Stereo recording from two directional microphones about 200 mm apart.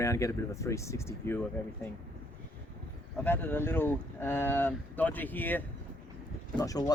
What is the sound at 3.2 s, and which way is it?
Speech, 10° left (ahead or behind).